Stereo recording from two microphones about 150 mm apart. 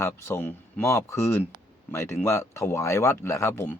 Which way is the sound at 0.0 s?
15° left (ahead or behind).